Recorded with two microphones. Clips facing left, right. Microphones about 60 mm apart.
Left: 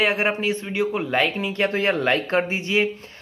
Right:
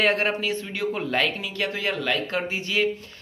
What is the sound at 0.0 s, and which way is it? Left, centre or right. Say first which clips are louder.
Speech: left 1 dB; centre.